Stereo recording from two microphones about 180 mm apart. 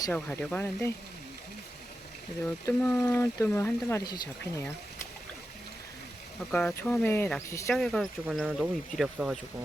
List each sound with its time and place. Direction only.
0.1 s speech: 10° left (ahead or behind)
2.6 s speech: 15° left (ahead or behind)
6.5 s speech: 10° left (ahead or behind)
7.7 s speech: 5° left (ahead or behind)